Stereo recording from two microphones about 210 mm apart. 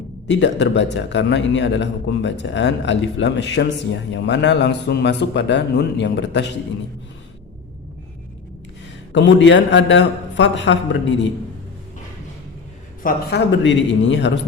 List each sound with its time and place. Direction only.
0.3 s a man's voice: 55° left (ahead or behind)
9.1 s a man's voice: 60° left (ahead or behind)
13.0 s a man's voice: 45° left (ahead or behind)